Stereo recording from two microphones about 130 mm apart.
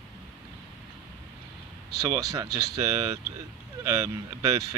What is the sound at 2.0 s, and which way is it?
Speech, 25° right (ahead or behind).